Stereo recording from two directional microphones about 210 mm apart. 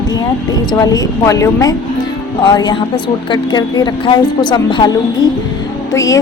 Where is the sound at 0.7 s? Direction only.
15° left (ahead or behind).